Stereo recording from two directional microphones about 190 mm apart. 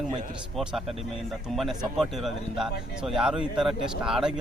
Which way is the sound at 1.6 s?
Centre (ahead or behind).